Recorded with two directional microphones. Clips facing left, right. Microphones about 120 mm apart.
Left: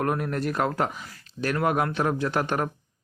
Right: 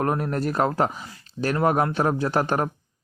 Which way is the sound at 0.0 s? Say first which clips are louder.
Right 2 dB; 35° right (ahead or behind).